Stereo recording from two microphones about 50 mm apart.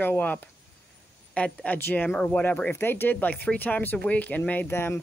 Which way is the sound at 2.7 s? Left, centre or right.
Left.